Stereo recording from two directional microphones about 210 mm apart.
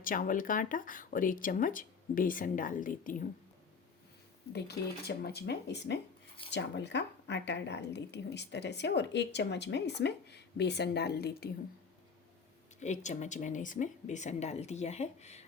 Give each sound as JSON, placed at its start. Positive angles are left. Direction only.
{"t": 0.0, "sound": "speech", "side_deg": 40}
{"t": 4.5, "sound": "speech", "side_deg": 50}
{"t": 12.8, "sound": "speech", "side_deg": 35}